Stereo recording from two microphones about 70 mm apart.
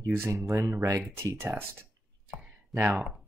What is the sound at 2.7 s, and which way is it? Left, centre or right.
Speech, right.